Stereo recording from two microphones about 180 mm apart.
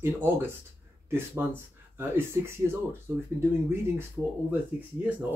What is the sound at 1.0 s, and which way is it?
Speech, 15° right (ahead or behind).